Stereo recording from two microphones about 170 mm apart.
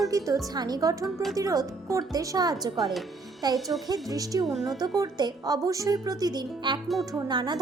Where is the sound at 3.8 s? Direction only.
20° right (ahead or behind).